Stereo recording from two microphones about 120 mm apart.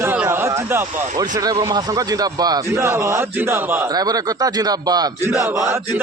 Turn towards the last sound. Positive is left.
turn(degrees=-25)  # may be behind; listen again after turning